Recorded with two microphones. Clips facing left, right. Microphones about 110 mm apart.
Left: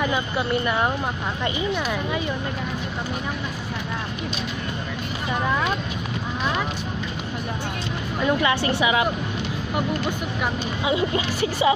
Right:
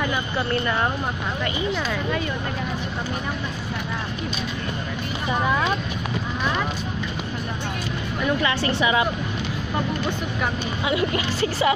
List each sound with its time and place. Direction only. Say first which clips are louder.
0.0 s speech: left 1 dB; 15° left (ahead or behind)
8.2 s a woman's voice: left 2 dB; 20° left (ahead or behind)
10.8 s a woman's voice: left 1 dB; 20° left (ahead or behind)